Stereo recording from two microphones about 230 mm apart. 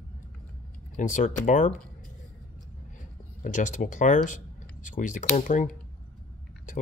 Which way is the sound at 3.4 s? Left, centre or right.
Left.